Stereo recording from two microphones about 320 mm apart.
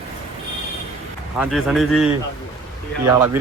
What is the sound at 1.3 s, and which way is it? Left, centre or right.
Speech, centre.